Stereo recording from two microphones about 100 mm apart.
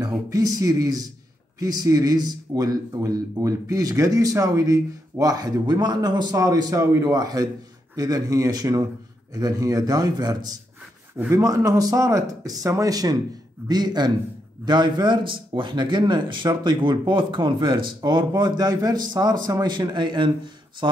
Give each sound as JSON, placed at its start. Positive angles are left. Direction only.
{"t": 0.0, "sound": "speech", "side_deg": -40}